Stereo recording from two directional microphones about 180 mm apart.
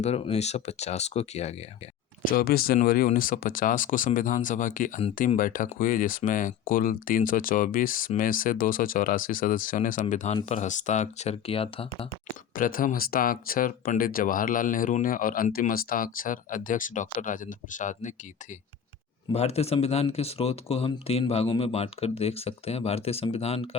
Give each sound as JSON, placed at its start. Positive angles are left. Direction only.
{"t": 0.0, "sound": "speech", "side_deg": 35}
{"t": 2.2, "sound": "speech", "side_deg": 55}
{"t": 12.5, "sound": "speech", "side_deg": 50}
{"t": 19.3, "sound": "speech", "side_deg": 35}